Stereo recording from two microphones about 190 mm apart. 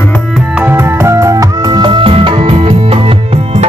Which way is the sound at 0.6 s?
10° right (ahead or behind).